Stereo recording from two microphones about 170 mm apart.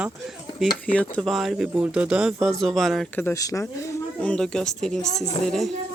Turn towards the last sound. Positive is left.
turn(degrees=0)  # may be behind; listen again after turning